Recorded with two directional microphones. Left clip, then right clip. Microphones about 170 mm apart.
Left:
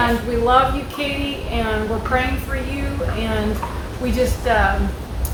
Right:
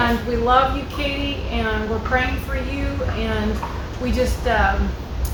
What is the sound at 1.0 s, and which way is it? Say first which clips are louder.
A woman's voice: left 1 dB; 15° left (ahead or behind).